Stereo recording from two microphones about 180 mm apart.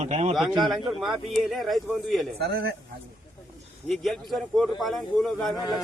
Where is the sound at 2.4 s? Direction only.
65° right (ahead or behind).